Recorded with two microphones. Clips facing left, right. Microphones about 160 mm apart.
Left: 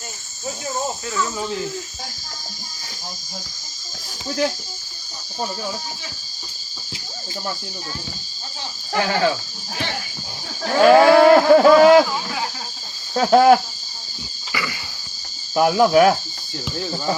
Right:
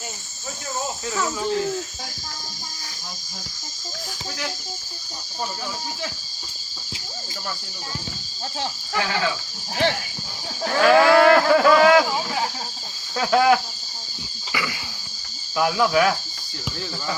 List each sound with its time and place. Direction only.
9.0 s cricket: 40° left (ahead or behind)
10.7 s moo: 25° left (ahead or behind)
13.1 s cricket: 35° left (ahead or behind)
14.5 s cricket: 10° right (ahead or behind)
15.5 s cricket: 35° left (ahead or behind)